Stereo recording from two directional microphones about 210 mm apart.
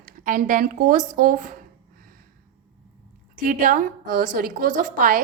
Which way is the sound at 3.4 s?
40° right (ahead or behind).